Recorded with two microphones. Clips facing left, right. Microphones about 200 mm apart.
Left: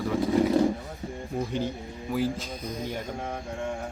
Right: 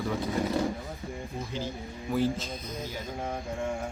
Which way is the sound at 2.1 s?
10° left (ahead or behind).